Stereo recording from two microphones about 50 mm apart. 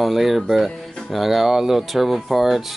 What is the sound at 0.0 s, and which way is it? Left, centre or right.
Speech, centre.